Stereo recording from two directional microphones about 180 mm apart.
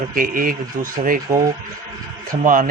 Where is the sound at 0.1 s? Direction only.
50° right (ahead or behind).